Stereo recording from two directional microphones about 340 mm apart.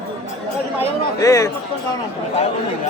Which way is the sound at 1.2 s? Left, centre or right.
Centre.